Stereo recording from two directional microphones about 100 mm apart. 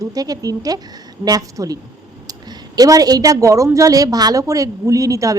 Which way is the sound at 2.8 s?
40° right (ahead or behind).